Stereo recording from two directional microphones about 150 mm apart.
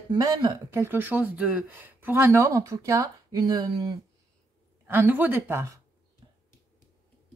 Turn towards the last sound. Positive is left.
turn(degrees=-15)  # may be behind; listen again after turning